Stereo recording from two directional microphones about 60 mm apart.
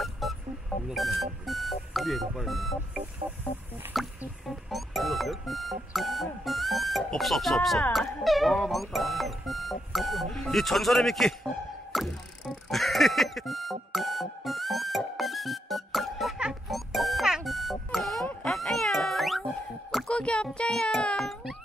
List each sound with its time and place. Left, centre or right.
0.0 s music: centre
0.8 s speech: centre
3.9 s a sound: centre
4.5 s music: centre
7.9 s speech: centre
11.9 s music: centre
18.4 s cat: centre
20.1 s music: centre
21.2 s music: centre